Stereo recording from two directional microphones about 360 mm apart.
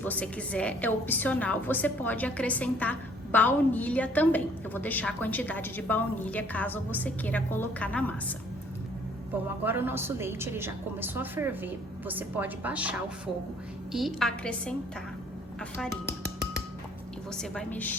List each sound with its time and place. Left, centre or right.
0.0 s a woman's voice: centre
9.6 s a woman's voice: centre
16.0 s music: right
17.3 s a woman's voice: centre